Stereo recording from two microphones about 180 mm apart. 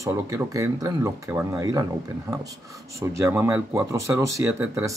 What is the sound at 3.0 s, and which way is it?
A man's voice, 15° right (ahead or behind).